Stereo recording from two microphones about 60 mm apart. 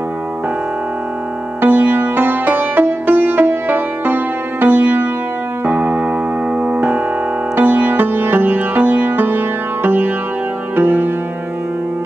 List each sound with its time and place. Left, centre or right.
1.6 s music: right